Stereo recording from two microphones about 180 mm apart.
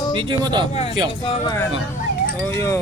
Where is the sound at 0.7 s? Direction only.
35° left (ahead or behind).